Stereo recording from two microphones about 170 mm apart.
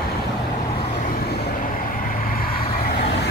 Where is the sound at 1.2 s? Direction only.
60° left (ahead or behind).